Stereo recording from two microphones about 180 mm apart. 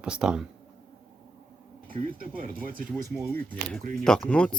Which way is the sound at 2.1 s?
50° right (ahead or behind).